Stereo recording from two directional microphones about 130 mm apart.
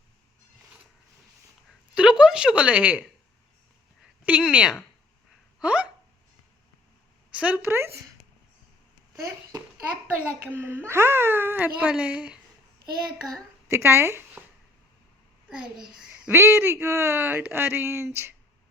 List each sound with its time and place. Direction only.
2.0 s a woman's voice: 5° right (ahead or behind)
4.3 s a child's voice: 10° right (ahead or behind)
5.5 s hiccup: 10° right (ahead or behind)
7.3 s a child's voice: 10° right (ahead or behind)
9.2 s a child's voice: 25° right (ahead or behind); by 12.4 s 5° right (ahead or behind)
13.2 s a woman's voice: 20° right (ahead or behind)
15.4 s a child's voice: 5° right (ahead or behind); by 18.3 s 20° right (ahead or behind)